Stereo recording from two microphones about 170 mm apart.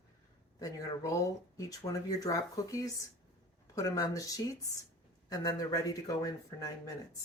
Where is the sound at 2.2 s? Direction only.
20° left (ahead or behind).